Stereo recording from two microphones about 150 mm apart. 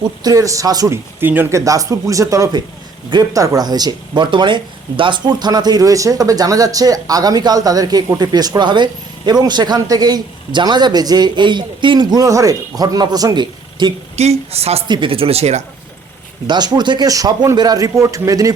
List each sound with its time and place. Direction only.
0.2 s speech: 25° right (ahead or behind)
1.2 s speech: 15° right (ahead or behind); by 13.9 s 30° right (ahead or behind)
14.2 s speech: 45° right (ahead or behind)
14.8 s speech: 30° right (ahead or behind)
16.5 s speech: 30° right (ahead or behind)